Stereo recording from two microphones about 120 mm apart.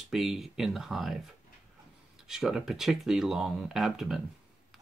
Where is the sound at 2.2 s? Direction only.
5° right (ahead or behind).